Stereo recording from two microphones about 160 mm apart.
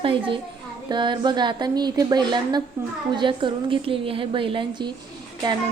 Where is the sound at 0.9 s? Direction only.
30° right (ahead or behind).